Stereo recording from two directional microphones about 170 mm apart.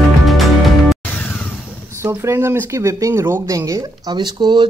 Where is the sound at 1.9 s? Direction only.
15° right (ahead or behind).